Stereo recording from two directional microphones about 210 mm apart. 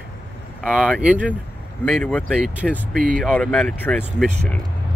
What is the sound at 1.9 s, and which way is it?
Speech, 5° left (ahead or behind).